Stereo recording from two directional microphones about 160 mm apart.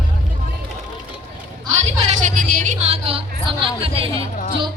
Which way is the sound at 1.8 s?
45° right (ahead or behind).